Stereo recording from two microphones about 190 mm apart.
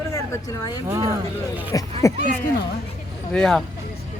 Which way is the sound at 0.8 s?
15° right (ahead or behind).